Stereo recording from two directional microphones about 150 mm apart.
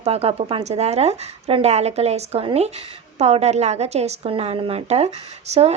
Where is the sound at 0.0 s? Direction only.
45° right (ahead or behind).